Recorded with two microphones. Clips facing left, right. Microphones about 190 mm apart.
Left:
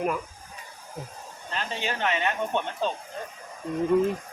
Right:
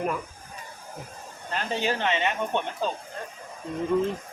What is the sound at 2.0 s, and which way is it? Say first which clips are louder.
Speech: right 1 dB; 25° right (ahead or behind).